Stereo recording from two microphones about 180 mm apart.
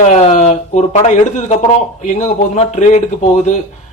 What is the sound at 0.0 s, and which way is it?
A man's voice, 40° left (ahead or behind).